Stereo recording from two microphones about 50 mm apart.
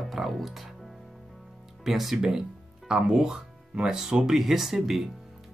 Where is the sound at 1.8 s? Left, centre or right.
Centre.